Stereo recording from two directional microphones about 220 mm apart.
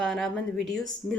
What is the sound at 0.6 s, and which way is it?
Speech, 55° right (ahead or behind).